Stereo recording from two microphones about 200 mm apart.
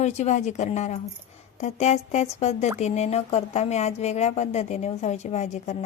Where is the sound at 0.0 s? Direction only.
35° left (ahead or behind).